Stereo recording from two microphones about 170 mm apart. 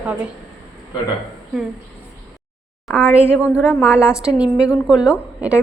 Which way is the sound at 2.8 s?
10° left (ahead or behind).